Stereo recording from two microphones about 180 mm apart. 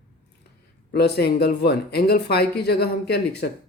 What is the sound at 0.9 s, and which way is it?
Speech, 65° left (ahead or behind).